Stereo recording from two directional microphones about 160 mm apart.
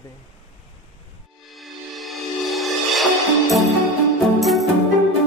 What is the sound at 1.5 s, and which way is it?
Music, centre (ahead or behind).